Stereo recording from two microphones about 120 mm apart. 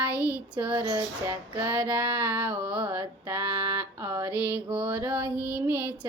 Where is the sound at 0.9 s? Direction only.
20° right (ahead or behind).